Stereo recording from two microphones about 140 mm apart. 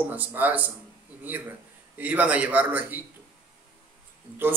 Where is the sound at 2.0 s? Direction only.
10° right (ahead or behind).